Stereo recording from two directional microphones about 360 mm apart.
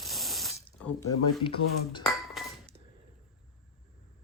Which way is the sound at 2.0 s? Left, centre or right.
Centre.